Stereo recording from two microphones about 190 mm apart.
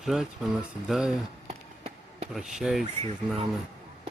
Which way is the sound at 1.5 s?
35° right (ahead or behind).